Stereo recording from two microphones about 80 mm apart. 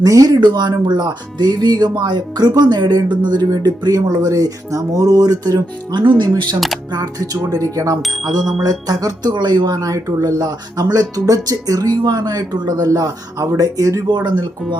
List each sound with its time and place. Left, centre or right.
0.0 s speech: right
0.4 s speech: right
3.5 s speech: right
6.9 s speech: right
8.0 s a sound: centre
8.6 s speech: right
9.3 s speech: right
9.7 s speech: right
14.1 s speech: right